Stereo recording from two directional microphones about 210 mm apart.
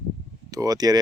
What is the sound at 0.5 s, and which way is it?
Speech, 15° right (ahead or behind).